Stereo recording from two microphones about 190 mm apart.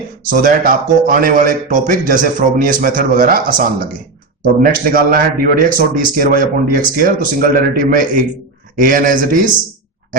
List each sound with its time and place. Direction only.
0.3 s a man's voice: 45° right (ahead or behind)